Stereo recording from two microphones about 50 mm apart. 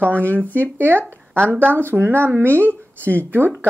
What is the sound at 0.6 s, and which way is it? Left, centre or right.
Speech, right.